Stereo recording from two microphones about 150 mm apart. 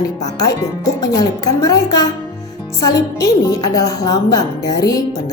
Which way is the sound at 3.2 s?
25° left (ahead or behind).